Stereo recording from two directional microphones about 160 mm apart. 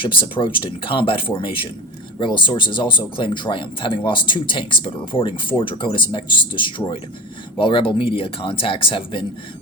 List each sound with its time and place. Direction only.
0.0 s speech: 30° left (ahead or behind)